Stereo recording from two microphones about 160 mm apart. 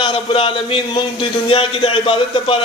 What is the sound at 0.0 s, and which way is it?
A man's voice, 35° left (ahead or behind).